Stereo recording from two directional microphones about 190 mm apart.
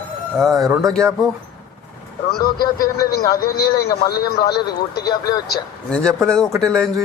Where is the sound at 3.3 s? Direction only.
55° left (ahead or behind).